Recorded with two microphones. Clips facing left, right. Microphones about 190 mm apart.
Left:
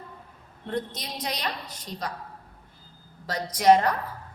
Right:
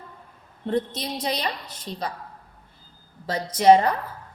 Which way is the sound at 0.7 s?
30° right (ahead or behind).